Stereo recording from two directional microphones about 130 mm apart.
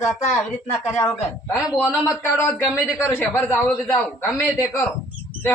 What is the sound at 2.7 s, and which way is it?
Speech, 5° right (ahead or behind).